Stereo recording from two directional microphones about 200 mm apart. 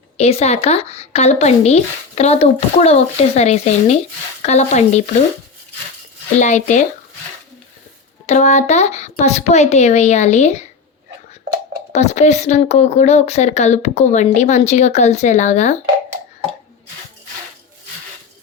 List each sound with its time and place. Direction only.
0.2 s speech: 30° left (ahead or behind)
6.4 s speech: 35° left (ahead or behind)
8.3 s speech: 35° left (ahead or behind)
11.9 s speech: 35° left (ahead or behind)